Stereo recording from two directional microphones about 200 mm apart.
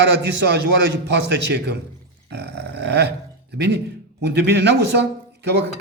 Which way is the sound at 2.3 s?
55° right (ahead or behind).